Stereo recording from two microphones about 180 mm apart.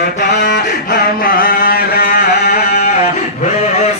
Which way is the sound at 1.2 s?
55° left (ahead or behind).